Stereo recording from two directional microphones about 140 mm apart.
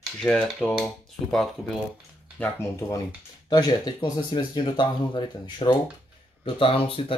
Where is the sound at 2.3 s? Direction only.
10° left (ahead or behind).